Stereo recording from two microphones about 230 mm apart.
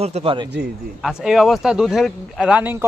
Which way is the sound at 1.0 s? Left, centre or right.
Centre.